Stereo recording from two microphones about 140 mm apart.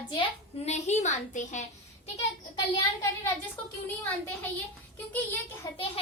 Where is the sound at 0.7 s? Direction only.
55° left (ahead or behind).